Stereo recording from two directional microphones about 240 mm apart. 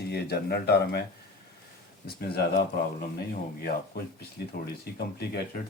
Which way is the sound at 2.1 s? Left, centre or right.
Left.